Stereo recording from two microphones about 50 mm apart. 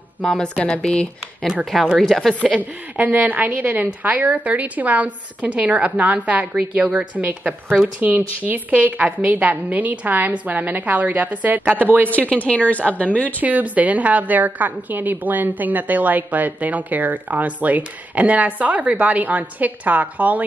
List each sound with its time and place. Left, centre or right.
0.2 s speech: centre
2.4 s a woman's voice: right
12.4 s speech: left
13.4 s a woman's voice: right